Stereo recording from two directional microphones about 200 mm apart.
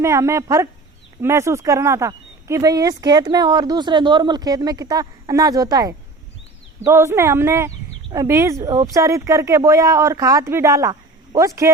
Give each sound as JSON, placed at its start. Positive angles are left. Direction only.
{"t": 0.0, "sound": "speech", "side_deg": -15}